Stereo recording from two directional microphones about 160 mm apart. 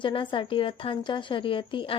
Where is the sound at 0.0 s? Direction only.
30° left (ahead or behind).